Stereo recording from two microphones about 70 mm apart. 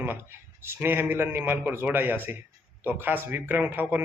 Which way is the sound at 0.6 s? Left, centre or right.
Right.